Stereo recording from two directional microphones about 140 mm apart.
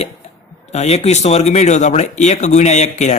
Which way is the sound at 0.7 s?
50° left (ahead or behind).